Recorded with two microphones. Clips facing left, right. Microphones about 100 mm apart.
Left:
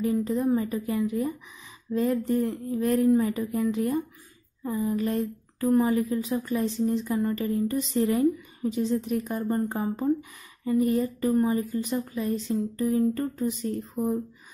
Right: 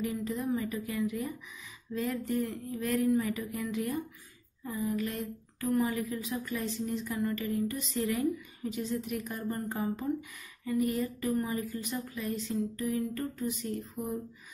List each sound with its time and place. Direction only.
0.0 s speech: 35° left (ahead or behind)